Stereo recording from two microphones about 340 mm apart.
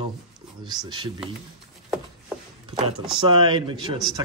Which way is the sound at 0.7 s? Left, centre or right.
Centre.